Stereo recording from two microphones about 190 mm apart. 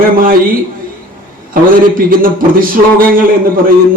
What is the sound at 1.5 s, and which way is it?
A man's voice, 50° right (ahead or behind).